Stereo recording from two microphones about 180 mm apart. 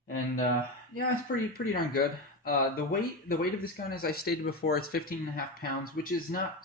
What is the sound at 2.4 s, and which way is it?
Speech, 55° left (ahead or behind).